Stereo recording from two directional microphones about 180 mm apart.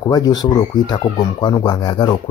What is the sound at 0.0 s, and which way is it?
Speech, 20° left (ahead or behind).